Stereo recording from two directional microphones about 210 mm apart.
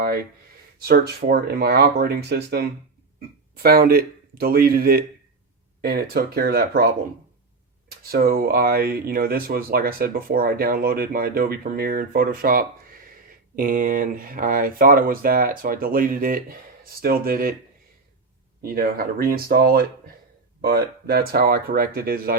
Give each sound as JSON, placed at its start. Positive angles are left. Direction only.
{"t": 0.0, "sound": "speech", "side_deg": -45}
{"t": 7.9, "sound": "speech", "side_deg": -45}
{"t": 18.6, "sound": "speech", "side_deg": -45}